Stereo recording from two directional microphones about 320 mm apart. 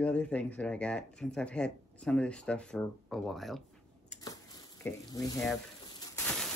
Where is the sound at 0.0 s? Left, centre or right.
Centre.